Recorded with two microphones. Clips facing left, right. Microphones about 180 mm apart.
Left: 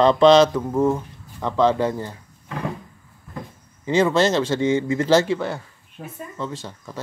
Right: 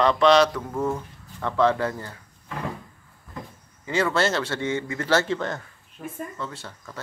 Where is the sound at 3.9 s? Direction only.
20° left (ahead or behind).